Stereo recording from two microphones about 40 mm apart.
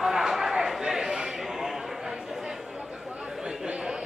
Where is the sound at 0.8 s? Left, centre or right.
Centre.